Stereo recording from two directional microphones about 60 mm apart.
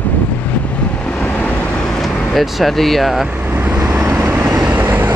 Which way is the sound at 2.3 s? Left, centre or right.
Centre.